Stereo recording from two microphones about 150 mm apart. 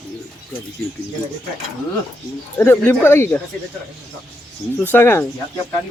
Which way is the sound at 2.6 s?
15° left (ahead or behind).